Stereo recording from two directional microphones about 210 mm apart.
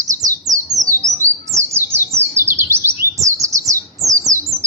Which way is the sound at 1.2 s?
15° right (ahead or behind).